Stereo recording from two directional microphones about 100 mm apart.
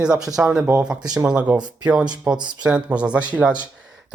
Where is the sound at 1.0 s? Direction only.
40° right (ahead or behind).